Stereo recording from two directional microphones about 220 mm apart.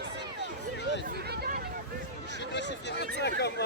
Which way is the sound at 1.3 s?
45° right (ahead or behind).